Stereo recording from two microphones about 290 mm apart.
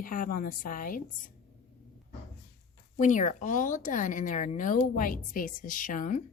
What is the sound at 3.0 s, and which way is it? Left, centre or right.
A woman's voice, left.